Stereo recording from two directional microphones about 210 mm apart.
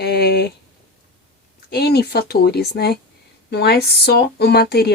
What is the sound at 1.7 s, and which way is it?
Speech, 50° left (ahead or behind).